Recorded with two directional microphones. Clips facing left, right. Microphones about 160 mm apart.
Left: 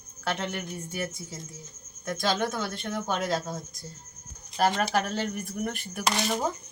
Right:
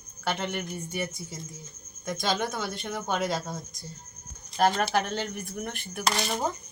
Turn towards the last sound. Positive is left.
turn(degrees=5)  # may be behind; listen again after turning